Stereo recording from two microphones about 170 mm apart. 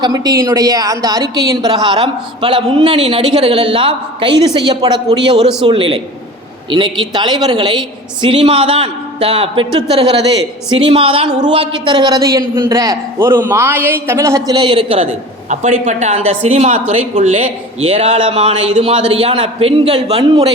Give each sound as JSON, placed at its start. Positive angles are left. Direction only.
{"t": 0.0, "sound": "a man's voice", "side_deg": -20}
{"t": 10.8, "sound": "a man's voice", "side_deg": -30}